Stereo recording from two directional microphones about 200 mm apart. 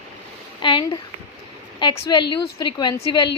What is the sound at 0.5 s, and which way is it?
A child's voice, 25° left (ahead or behind).